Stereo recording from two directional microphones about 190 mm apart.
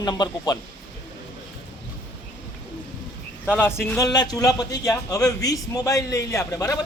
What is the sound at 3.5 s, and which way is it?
A man's voice, 10° left (ahead or behind).